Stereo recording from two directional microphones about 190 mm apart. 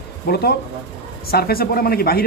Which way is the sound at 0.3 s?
55° left (ahead or behind).